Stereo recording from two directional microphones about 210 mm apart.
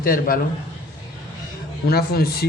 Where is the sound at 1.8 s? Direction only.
50° left (ahead or behind).